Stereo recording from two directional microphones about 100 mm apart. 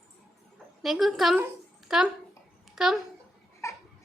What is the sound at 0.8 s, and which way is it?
A woman's voice, centre (ahead or behind).